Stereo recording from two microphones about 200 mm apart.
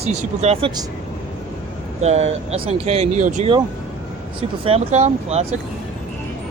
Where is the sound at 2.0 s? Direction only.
35° right (ahead or behind).